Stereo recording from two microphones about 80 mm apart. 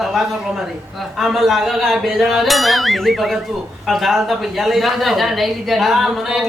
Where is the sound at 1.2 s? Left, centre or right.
Centre.